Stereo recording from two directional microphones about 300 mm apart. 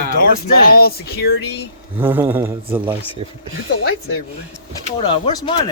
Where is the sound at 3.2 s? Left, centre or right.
Centre.